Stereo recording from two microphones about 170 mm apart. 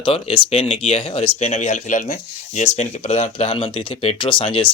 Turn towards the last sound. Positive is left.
turn(degrees=30)  # may be behind; listen again after turning